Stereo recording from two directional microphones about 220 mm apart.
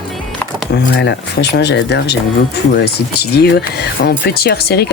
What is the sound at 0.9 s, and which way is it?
Speech, 50° left (ahead or behind).